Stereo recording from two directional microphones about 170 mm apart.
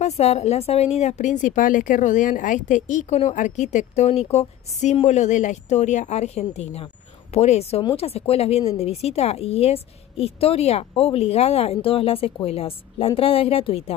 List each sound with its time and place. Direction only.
0.0 s a woman's voice: 40° left (ahead or behind)